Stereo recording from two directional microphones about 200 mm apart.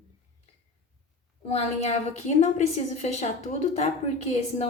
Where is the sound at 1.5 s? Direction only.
35° left (ahead or behind).